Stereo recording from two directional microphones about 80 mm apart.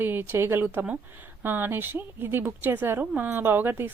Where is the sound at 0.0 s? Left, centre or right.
Right.